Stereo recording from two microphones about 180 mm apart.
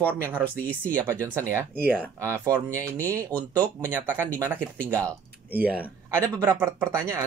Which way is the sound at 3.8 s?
10° right (ahead or behind).